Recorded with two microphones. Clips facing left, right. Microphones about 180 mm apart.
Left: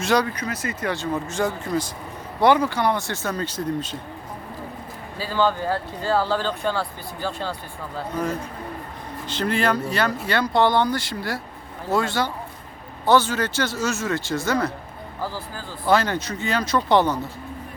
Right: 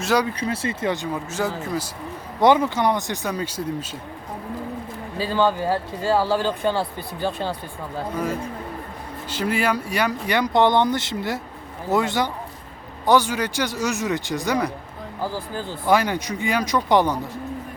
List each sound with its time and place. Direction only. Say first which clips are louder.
0.0 s speech: even; 5° right (ahead or behind)
0.3 s speech: right 3 dB; 30° right (ahead or behind)
1.1 s speech: left 1 dB; 5° right (ahead or behind)
2.4 s speech: right 1 dB; 20° right (ahead or behind)
5.2 s speech: right 1 dB; 15° right (ahead or behind)
9.3 s speech: even; 10° right (ahead or behind)